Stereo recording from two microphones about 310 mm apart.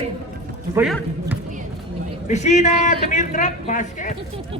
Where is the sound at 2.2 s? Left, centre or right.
Left.